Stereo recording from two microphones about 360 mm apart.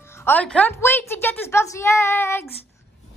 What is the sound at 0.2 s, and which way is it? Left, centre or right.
A woman's voice, centre.